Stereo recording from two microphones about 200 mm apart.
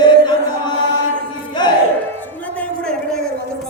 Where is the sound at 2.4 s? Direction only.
5° left (ahead or behind).